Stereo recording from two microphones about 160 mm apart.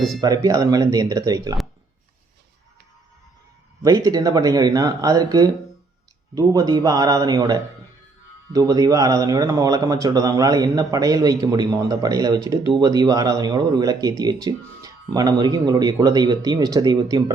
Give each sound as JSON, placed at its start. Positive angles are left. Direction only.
{"t": 0.2, "sound": "speech", "side_deg": -20}
{"t": 3.8, "sound": "speech", "side_deg": -25}